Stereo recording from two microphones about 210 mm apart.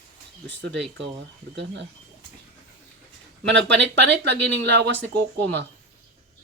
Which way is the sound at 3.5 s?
60° right (ahead or behind).